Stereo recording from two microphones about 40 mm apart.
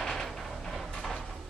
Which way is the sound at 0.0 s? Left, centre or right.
Centre.